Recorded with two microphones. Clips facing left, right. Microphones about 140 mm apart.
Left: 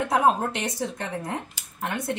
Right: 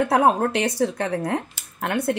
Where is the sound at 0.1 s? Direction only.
70° right (ahead or behind).